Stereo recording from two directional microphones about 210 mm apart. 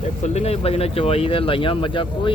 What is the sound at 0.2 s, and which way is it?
Speech, 30° left (ahead or behind).